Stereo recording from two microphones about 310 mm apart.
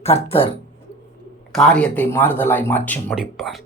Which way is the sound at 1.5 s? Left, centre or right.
Centre.